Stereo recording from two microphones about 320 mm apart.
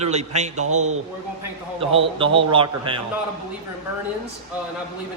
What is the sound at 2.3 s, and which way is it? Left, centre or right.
Speech, centre.